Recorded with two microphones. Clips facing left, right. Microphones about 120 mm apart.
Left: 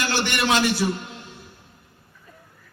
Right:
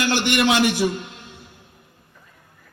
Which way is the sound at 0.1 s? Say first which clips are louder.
Right 3 dB; 15° right (ahead or behind).